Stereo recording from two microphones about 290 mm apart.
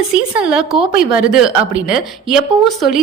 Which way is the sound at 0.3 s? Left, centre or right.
Centre.